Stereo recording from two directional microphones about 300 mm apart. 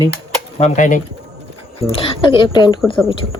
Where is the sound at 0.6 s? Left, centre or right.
Left.